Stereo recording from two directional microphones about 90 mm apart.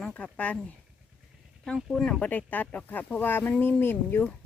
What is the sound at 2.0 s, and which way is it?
Speech, 5° left (ahead or behind).